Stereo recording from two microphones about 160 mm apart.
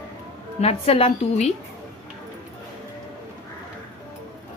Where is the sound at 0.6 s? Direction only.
40° left (ahead or behind).